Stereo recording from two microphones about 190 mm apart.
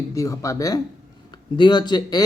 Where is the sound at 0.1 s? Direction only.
15° left (ahead or behind).